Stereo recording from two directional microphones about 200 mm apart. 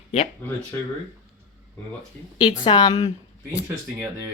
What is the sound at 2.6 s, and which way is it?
Speech, 20° left (ahead or behind).